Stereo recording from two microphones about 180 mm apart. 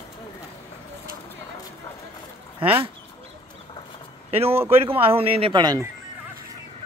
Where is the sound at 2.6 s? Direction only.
30° right (ahead or behind).